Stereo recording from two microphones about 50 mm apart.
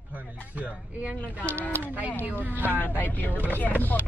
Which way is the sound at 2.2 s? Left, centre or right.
Right.